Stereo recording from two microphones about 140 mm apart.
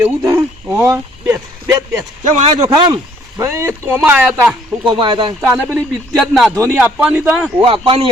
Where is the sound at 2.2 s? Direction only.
55° right (ahead or behind).